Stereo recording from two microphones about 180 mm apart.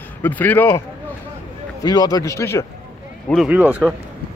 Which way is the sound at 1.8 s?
20° left (ahead or behind).